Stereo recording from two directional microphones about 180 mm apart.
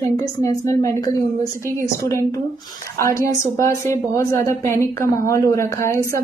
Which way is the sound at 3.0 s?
15° left (ahead or behind).